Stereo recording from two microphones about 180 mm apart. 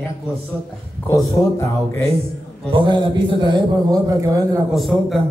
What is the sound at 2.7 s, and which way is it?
A man's voice, 25° right (ahead or behind).